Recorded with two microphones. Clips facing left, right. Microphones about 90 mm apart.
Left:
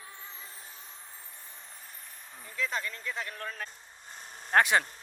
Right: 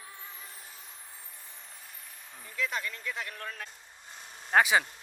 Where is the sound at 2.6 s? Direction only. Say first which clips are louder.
Even; 35° left (ahead or behind).